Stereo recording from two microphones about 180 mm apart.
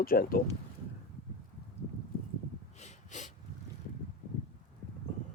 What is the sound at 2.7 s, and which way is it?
Wheeze, 40° left (ahead or behind).